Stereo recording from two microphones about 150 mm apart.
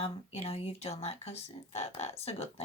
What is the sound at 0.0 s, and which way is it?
Speech, 40° left (ahead or behind).